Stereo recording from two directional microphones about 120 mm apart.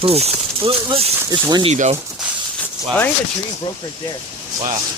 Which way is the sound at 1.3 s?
35° right (ahead or behind).